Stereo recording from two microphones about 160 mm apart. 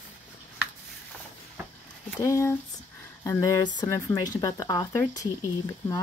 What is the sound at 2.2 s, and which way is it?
Speech, 20° left (ahead or behind).